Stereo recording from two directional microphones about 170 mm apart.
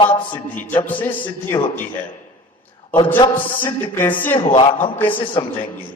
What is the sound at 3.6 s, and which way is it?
A man's voice, 10° left (ahead or behind).